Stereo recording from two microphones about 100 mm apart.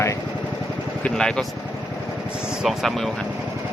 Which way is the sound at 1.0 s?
5° left (ahead or behind).